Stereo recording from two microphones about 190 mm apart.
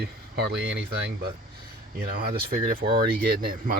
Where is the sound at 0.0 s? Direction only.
60° right (ahead or behind).